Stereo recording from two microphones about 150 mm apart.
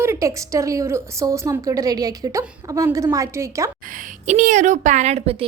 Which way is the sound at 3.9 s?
55° right (ahead or behind).